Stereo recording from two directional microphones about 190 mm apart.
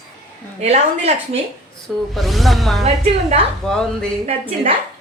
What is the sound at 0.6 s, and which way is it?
Speech, 35° right (ahead or behind).